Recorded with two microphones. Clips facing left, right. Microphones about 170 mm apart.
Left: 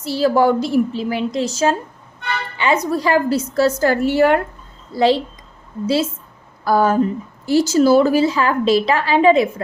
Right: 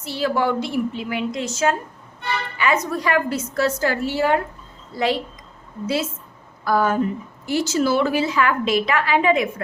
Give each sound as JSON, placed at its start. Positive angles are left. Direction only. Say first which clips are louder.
{"t": 0.0, "sound": "a woman's voice", "louder": "left 6 dB", "side_deg": 35}
{"t": 4.9, "sound": "a woman's voice", "louder": "left 6 dB", "side_deg": 30}